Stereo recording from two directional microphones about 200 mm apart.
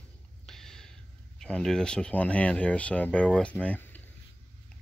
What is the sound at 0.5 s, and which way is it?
Speech, centre (ahead or behind).